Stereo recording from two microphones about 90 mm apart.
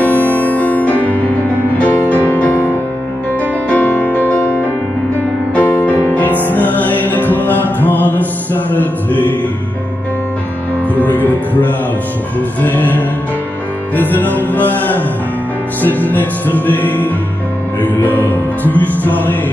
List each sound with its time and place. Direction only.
0.0 s music: 20° left (ahead or behind)
11.0 s music: 20° left (ahead or behind)